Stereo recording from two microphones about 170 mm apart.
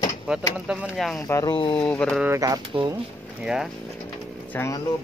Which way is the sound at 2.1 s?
15° right (ahead or behind).